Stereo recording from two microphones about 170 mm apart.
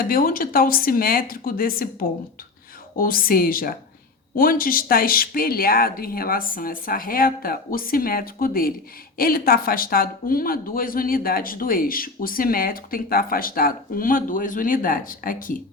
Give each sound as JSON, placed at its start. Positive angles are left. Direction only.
{"t": 0.0, "sound": "speech", "side_deg": 55}